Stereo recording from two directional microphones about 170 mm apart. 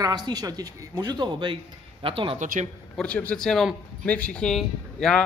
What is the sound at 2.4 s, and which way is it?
Speech, 45° right (ahead or behind).